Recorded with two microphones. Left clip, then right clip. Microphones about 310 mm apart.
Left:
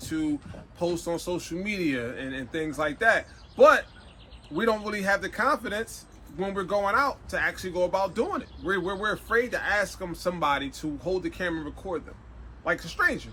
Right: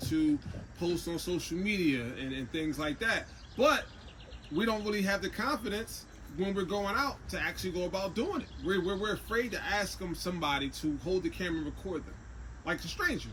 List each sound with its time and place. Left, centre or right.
0.8 s speech: centre